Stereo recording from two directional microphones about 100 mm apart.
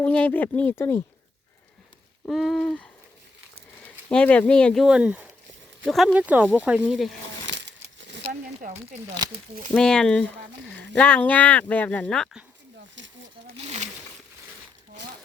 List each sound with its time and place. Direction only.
0.0 s speech: 15° left (ahead or behind)
2.3 s a sound: centre (ahead or behind)
4.1 s speech: 10° left (ahead or behind)
4.9 s speech: 10° right (ahead or behind)
5.9 s a sound: centre (ahead or behind)
6.1 s speech: 15° right (ahead or behind)
9.2 s speech: 45° right (ahead or behind)
9.7 s speech: 10° left (ahead or behind)